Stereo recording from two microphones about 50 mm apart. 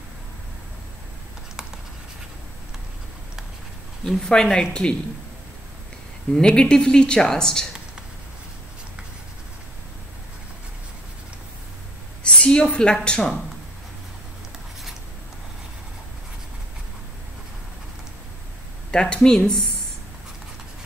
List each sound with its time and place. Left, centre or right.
4.0 s speech: centre
6.3 s speech: centre
12.2 s a sound: left
12.5 s speech: centre
18.9 s speech: centre